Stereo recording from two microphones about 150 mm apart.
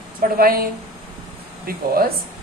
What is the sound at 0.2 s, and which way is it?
A woman's voice, 75° right (ahead or behind).